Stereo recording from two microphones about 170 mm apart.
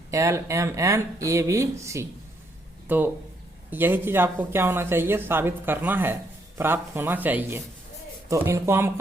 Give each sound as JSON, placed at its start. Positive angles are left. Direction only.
{"t": 0.1, "sound": "speech", "side_deg": -15}